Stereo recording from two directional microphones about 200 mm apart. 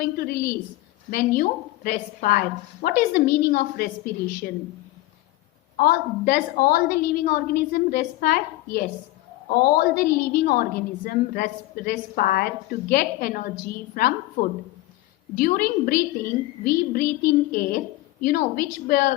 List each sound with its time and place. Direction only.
0.0 s a woman's voice: 50° left (ahead or behind)
5.7 s a woman's voice: 45° left (ahead or behind)